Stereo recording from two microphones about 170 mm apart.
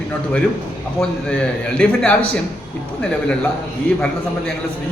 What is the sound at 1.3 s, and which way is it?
A man's voice, 5° left (ahead or behind).